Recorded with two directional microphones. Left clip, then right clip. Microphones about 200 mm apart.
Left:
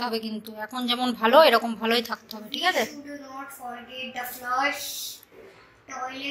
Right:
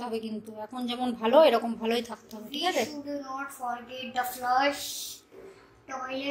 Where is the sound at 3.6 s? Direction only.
35° right (ahead or behind).